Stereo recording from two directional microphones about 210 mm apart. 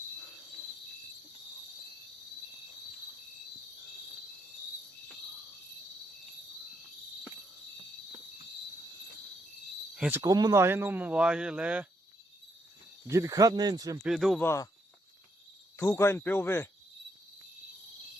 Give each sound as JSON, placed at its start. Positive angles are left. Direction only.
{"t": 10.0, "sound": "speech", "side_deg": -10}
{"t": 13.1, "sound": "speech", "side_deg": -15}
{"t": 14.0, "sound": "speech", "side_deg": 0}
{"t": 14.4, "sound": "speech", "side_deg": 15}
{"t": 15.8, "sound": "speech", "side_deg": 10}